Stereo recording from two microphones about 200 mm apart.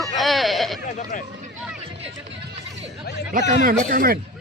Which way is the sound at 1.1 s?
45° left (ahead or behind).